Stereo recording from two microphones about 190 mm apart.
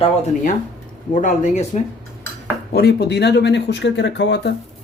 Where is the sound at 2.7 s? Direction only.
60° left (ahead or behind).